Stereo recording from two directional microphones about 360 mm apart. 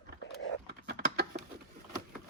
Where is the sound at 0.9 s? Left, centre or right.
Right.